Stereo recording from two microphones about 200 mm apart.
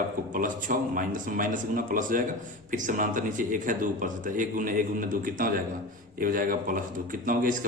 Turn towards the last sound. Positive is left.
turn(degrees=-40)  # may be behind; listen again after turning